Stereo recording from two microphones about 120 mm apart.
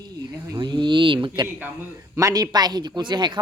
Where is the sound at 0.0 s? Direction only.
35° right (ahead or behind).